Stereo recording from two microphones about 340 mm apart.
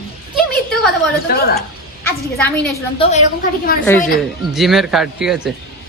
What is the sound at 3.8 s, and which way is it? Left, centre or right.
A man's voice, centre.